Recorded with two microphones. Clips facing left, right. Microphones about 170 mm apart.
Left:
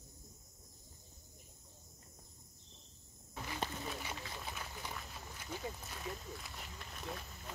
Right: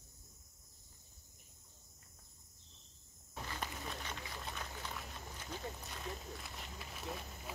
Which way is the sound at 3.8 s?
5° left (ahead or behind).